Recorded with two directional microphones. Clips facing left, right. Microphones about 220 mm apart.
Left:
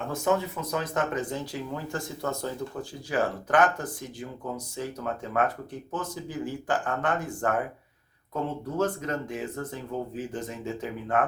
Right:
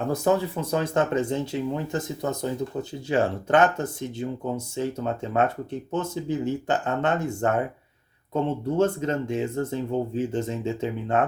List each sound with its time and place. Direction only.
0.1 s speech: 35° right (ahead or behind)